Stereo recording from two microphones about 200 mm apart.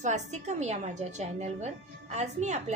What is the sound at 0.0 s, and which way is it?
A woman's voice, 35° right (ahead or behind).